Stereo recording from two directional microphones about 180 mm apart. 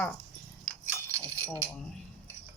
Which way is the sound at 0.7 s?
10° left (ahead or behind).